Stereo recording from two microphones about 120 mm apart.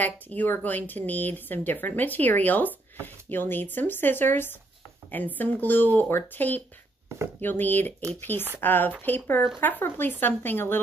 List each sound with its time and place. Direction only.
0.0 s speech: 15° left (ahead or behind)